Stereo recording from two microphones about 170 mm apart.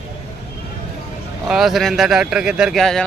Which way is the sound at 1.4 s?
Centre (ahead or behind).